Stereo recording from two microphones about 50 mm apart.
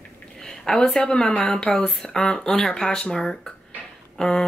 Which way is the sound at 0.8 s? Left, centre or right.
Centre.